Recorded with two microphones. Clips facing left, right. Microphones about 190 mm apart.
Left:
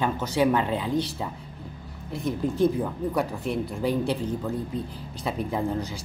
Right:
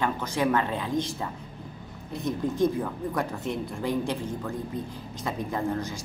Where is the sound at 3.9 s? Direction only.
10° left (ahead or behind).